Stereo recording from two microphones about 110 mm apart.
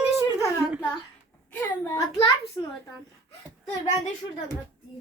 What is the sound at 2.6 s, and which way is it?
Speech, 35° left (ahead or behind).